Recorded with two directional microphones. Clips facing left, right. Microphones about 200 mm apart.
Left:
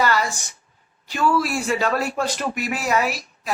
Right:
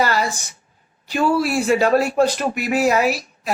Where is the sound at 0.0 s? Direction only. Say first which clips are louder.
Right 1 dB; 35° right (ahead or behind).